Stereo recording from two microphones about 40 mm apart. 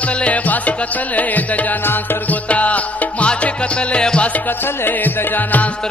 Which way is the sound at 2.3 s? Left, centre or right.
Left.